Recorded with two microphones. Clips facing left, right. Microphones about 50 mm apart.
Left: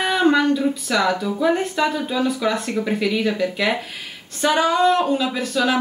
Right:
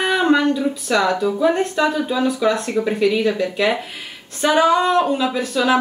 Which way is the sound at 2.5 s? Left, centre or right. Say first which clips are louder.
Right 3 dB; centre.